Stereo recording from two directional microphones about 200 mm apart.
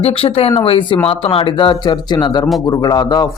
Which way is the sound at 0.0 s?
30° left (ahead or behind).